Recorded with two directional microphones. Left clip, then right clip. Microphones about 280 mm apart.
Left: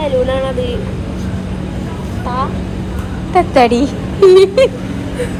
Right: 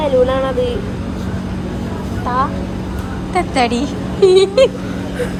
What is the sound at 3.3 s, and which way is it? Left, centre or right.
Speech, centre.